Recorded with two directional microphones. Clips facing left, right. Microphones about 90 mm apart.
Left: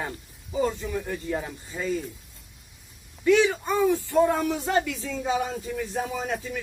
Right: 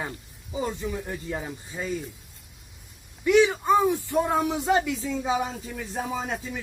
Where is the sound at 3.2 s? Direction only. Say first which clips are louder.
Right 1 dB; 15° right (ahead or behind).